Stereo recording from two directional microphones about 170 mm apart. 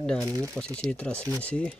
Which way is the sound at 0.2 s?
20° right (ahead or behind).